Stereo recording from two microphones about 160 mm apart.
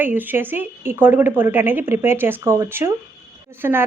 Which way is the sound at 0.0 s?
10° right (ahead or behind).